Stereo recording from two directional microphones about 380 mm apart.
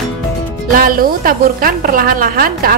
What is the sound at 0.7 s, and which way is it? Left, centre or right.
A woman's voice, right.